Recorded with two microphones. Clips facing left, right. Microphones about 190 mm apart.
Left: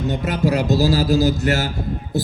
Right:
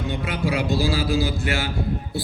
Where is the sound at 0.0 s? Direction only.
45° left (ahead or behind).